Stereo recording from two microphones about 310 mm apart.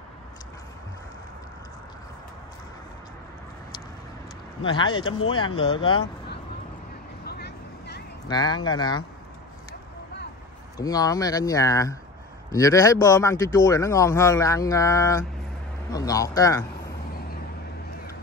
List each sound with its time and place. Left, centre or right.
4.6 s a man's voice: centre
7.2 s vehicle: left
8.3 s a man's voice: centre
10.8 s a man's voice: centre